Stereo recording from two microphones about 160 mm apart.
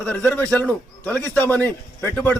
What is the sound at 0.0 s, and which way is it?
A man's voice, 5° left (ahead or behind).